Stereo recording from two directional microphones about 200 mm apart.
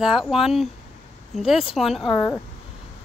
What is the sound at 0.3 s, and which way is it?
Speech, centre (ahead or behind).